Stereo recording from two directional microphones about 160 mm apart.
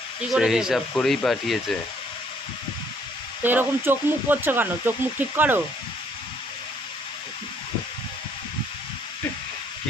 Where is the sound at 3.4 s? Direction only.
10° right (ahead or behind).